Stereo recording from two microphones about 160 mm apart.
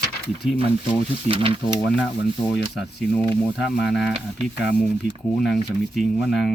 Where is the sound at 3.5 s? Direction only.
Centre (ahead or behind).